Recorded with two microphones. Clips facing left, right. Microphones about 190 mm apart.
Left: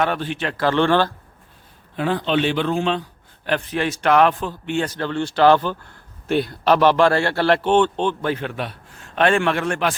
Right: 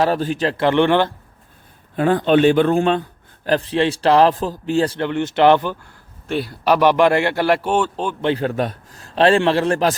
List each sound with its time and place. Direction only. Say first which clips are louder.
0.0 s a man's voice: right 4 dB; 40° right (ahead or behind)
0.5 s speech: right 1 dB; 20° right (ahead or behind)
2.0 s a man's voice: right 6 dB; 50° right (ahead or behind)
3.4 s a man's voice: right 5 dB; 35° right (ahead or behind)
4.9 s speech: right 2 dB; 20° right (ahead or behind)
6.2 s a man's voice: left 1 dB; centre (ahead or behind)
8.2 s a man's voice: right 5 dB; 30° right (ahead or behind)